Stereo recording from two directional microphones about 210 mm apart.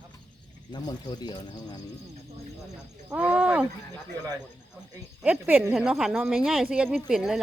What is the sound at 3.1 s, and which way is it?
Speech, 5° right (ahead or behind).